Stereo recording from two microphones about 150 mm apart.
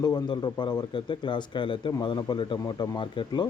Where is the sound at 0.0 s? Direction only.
30° left (ahead or behind).